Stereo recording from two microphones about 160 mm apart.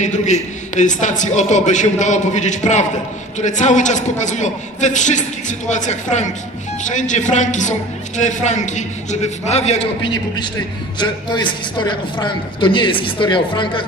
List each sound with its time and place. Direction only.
0.0 s a man's voice: 50° left (ahead or behind)
11.0 s a man's voice: 30° left (ahead or behind)